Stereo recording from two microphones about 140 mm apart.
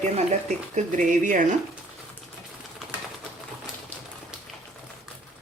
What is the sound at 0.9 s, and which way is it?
Speech, 65° right (ahead or behind).